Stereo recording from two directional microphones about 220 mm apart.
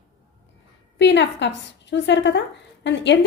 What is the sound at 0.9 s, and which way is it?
A woman's voice, 55° left (ahead or behind).